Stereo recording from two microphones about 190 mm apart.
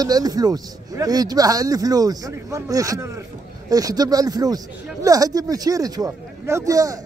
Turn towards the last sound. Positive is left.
turn(degrees=-15)  # may be behind; listen again after turning